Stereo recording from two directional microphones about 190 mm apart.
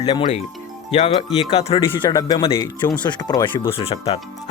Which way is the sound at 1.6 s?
30° left (ahead or behind).